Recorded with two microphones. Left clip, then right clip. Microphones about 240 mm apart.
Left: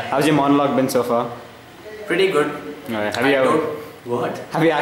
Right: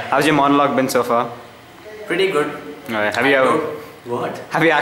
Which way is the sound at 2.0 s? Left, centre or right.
Centre.